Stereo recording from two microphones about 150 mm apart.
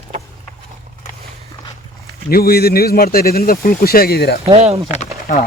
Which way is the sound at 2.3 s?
85° left.